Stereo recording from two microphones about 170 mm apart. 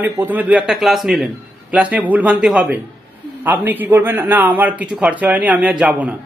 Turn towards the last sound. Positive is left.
turn(degrees=-5)  # may be behind; listen again after turning